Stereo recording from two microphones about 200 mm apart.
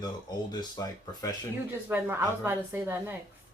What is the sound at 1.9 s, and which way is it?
A woman's voice, 10° right (ahead or behind).